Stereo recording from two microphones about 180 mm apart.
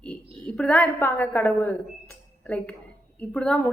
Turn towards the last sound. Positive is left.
turn(degrees=5)  # may be behind; listen again after turning